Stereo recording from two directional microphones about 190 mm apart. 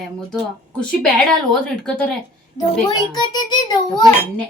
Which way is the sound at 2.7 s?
20° left (ahead or behind).